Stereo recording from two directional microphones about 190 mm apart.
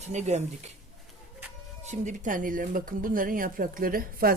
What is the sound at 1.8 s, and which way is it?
Speech, 40° right (ahead or behind).